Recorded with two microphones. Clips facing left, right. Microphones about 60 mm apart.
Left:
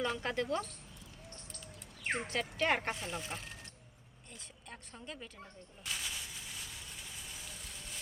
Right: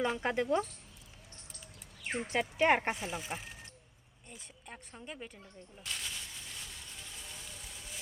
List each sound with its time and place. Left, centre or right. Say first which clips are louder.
0.0 s speech: right 3 dB; centre
2.0 s speech: left 1 dB; left
2.3 s speech: right 6 dB; centre
5.8 s a sound: even; centre